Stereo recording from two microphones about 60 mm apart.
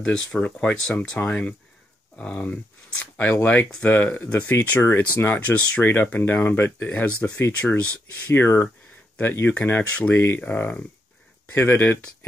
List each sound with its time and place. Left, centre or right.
0.0 s speech: centre
8.3 s speech: left